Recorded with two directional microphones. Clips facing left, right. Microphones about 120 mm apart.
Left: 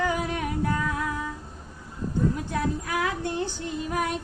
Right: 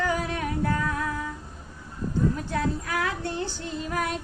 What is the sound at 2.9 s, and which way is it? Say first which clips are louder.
Child singing: left 1 dB; 15° left (ahead or behind).